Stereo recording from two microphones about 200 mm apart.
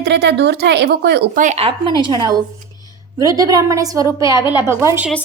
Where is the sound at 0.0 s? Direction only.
55° right (ahead or behind).